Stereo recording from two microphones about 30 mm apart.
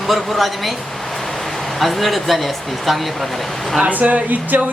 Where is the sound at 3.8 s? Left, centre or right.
Right.